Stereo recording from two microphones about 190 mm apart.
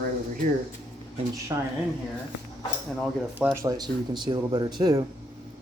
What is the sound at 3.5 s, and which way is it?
Speech, 20° right (ahead or behind).